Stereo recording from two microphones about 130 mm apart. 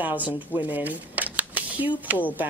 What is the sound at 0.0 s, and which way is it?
A woman's voice, 15° right (ahead or behind).